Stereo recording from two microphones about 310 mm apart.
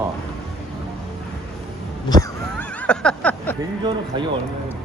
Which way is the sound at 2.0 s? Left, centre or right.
Centre.